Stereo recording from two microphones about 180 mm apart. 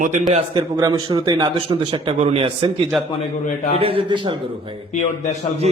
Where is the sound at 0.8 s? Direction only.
25° right (ahead or behind).